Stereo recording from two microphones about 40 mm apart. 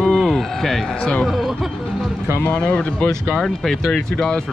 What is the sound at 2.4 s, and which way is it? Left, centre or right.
Speech, left.